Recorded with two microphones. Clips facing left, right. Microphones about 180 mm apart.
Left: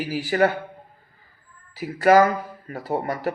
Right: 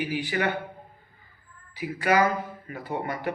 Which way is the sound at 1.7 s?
40° left (ahead or behind).